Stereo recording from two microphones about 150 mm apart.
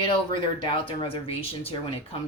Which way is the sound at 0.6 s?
30° left (ahead or behind).